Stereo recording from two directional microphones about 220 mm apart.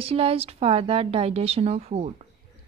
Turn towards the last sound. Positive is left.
turn(degrees=-30)  # may be behind; listen again after turning